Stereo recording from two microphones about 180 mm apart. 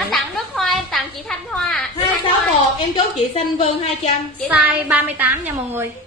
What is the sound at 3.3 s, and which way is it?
Speech, 35° left (ahead or behind).